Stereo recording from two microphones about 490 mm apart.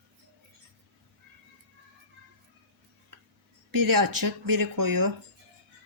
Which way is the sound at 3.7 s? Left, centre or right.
Right.